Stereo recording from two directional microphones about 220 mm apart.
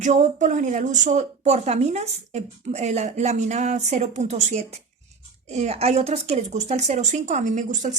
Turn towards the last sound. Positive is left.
turn(degrees=-35)  # may be behind; listen again after turning